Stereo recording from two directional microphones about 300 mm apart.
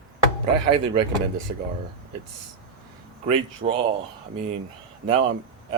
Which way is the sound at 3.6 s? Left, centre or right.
Right.